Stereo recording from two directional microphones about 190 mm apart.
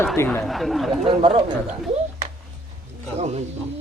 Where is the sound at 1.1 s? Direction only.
30° right (ahead or behind).